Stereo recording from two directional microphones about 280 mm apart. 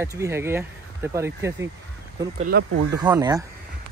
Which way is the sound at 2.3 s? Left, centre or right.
Right.